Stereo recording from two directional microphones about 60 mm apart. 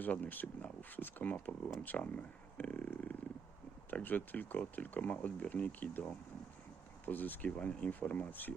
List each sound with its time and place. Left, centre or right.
0.0 s speech: left